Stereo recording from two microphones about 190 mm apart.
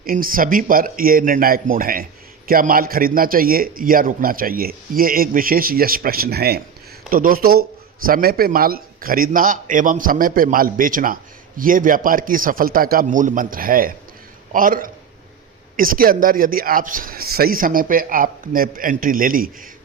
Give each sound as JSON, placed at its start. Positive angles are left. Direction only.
{"t": 0.0, "sound": "a man's voice", "side_deg": -50}